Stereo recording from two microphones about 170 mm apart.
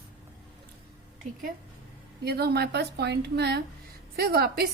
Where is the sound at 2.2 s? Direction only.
70° right (ahead or behind).